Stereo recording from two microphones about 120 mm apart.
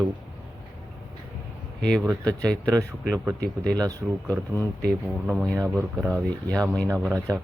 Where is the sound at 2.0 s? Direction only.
25° right (ahead or behind).